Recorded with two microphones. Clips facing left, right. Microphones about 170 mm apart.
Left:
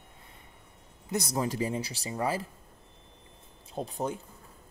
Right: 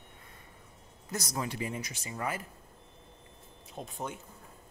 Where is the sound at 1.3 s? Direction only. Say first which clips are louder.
Left 5 dB; 35° left (ahead or behind).